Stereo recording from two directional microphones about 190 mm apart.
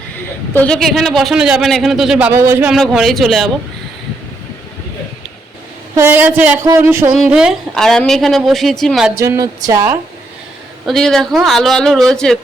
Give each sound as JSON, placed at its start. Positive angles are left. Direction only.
{"t": 0.5, "sound": "a man's voice", "side_deg": 5}
{"t": 2.7, "sound": "a man's voice", "side_deg": 0}
{"t": 6.0, "sound": "music", "side_deg": -10}
{"t": 7.2, "sound": "a man's voice", "side_deg": -5}
{"t": 9.1, "sound": "music", "side_deg": -15}
{"t": 10.8, "sound": "a man's voice", "side_deg": 0}